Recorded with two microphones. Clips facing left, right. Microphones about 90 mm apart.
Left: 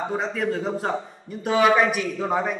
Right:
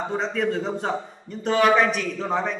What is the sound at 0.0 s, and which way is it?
A man's voice, 5° left (ahead or behind).